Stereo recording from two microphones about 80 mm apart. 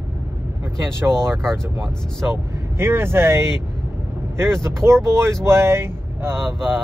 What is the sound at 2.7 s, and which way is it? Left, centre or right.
Speech, right.